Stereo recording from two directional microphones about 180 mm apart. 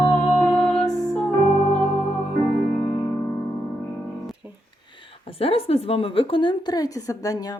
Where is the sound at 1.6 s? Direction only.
35° left (ahead or behind).